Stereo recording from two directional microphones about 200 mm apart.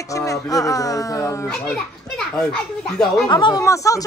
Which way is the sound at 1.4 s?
5° left (ahead or behind).